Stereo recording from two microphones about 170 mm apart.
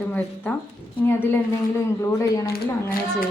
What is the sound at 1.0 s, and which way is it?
Speech, 10° left (ahead or behind).